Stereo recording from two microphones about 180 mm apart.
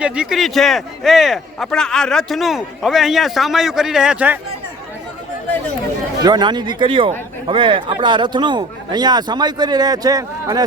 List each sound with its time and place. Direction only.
0.0 s a man's voice: 5° right (ahead or behind)
6.2 s speech: 25° right (ahead or behind)